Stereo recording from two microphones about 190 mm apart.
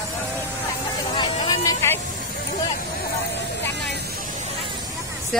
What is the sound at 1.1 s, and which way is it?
Vehicle, 25° left (ahead or behind).